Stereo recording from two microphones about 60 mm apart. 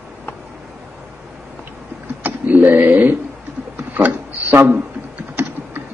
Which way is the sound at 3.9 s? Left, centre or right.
Right.